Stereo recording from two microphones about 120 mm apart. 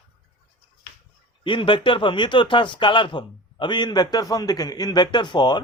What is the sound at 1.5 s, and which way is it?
A man's voice, 45° left (ahead or behind).